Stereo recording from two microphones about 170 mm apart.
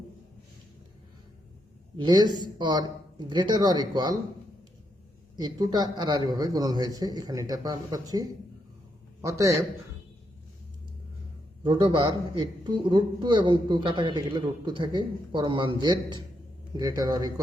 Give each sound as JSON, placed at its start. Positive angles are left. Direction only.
{"t": 2.0, "sound": "a man's voice", "side_deg": -25}
{"t": 5.4, "sound": "a man's voice", "side_deg": -25}
{"t": 11.6, "sound": "a man's voice", "side_deg": -30}